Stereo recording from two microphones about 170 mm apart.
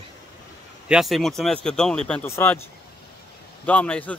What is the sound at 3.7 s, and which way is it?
Speech, 10° left (ahead or behind).